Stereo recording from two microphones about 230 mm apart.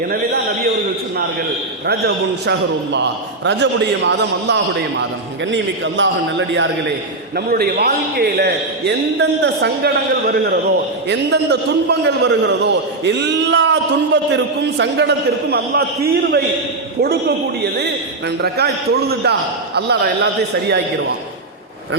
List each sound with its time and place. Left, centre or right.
1.9 s a man's voice: right
7.3 s a man's voice: right
11.1 s a man's voice: right